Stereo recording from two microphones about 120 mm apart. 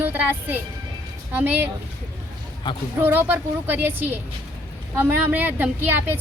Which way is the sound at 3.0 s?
15° right (ahead or behind).